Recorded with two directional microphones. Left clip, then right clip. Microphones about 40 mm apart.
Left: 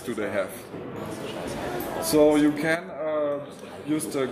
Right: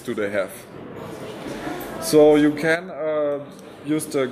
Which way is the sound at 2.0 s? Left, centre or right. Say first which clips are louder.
Right 5 dB; right.